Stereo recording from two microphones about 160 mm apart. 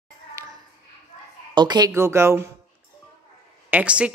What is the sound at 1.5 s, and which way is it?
Speech, 25° right (ahead or behind).